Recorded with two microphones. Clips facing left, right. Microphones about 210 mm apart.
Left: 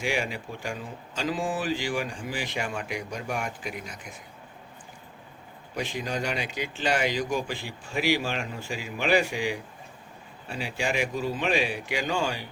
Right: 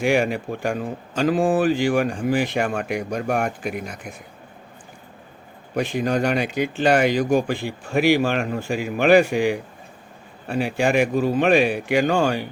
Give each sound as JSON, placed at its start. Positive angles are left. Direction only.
{"t": 0.0, "sound": "speech", "side_deg": -55}
{"t": 5.7, "sound": "speech", "side_deg": -55}